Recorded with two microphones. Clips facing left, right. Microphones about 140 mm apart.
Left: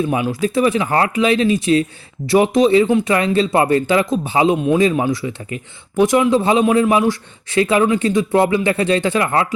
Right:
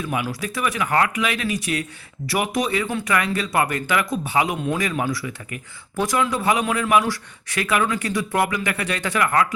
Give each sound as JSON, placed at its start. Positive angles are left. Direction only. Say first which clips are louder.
{"t": 0.0, "sound": "a man's voice", "louder": "left 8 dB", "side_deg": 25}